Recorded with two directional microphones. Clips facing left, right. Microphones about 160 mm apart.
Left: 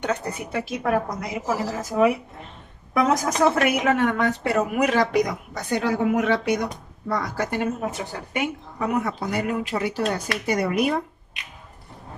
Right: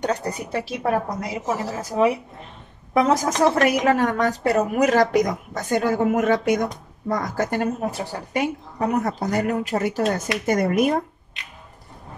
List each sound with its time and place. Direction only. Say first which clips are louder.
0.0 s a woman's voice: right 2 dB; 35° right (ahead or behind)
2.9 s a woman's voice: right 2 dB; 30° right (ahead or behind); by 11.0 s 45° right (ahead or behind)